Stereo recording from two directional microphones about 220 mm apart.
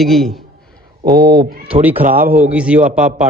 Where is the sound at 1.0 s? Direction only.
45° right (ahead or behind).